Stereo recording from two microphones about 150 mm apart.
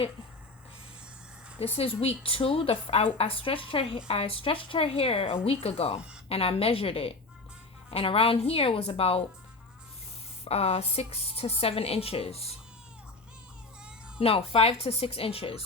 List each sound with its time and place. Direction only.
1.5 s a woman's voice: 40° left (ahead or behind)
10.4 s a woman's voice: 45° left (ahead or behind)
14.2 s a woman's voice: 40° left (ahead or behind)